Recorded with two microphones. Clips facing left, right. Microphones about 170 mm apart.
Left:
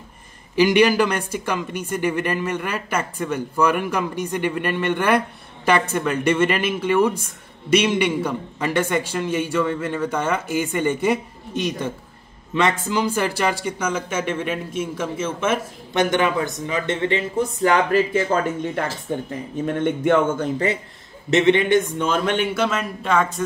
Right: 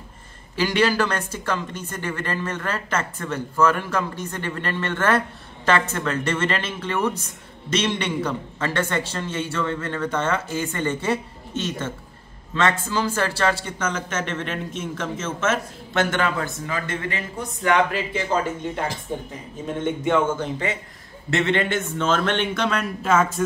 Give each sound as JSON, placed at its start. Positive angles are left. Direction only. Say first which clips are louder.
{"t": 0.6, "sound": "speech", "louder": "left 5 dB", "side_deg": 15}
{"t": 19.1, "sound": "speech", "louder": "left 5 dB", "side_deg": 65}
{"t": 21.3, "sound": "speech", "louder": "left 6 dB", "side_deg": 20}